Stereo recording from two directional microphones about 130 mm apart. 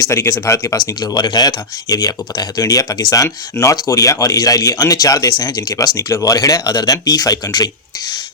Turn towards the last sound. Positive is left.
turn(degrees=30)  # may be behind; listen again after turning